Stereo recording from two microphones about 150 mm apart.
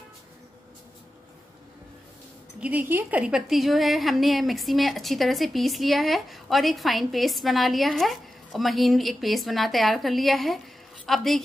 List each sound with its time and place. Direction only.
2.6 s a woman's voice: 10° right (ahead or behind)